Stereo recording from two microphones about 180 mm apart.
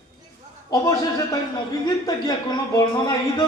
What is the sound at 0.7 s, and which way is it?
A man's voice, 20° left (ahead or behind).